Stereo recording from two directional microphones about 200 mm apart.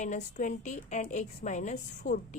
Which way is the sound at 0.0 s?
35° left (ahead or behind).